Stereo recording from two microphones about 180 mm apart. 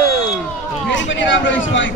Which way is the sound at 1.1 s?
90° left.